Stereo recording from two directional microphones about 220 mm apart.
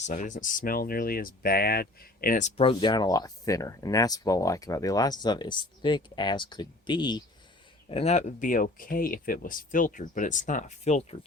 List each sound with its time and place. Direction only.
0.0 s speech: 35° left (ahead or behind)
2.6 s speech: 20° left (ahead or behind)